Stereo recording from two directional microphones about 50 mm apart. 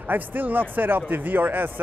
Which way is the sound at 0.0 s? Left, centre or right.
Right.